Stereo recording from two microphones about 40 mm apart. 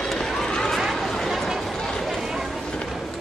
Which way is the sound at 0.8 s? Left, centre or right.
Centre.